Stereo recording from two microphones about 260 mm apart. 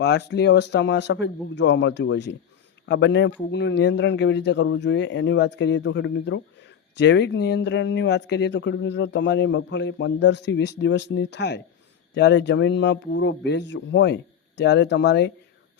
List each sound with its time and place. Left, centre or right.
0.0 s a man's voice: left